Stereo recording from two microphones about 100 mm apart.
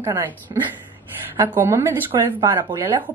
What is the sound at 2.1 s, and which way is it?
Speech, 45° right (ahead or behind).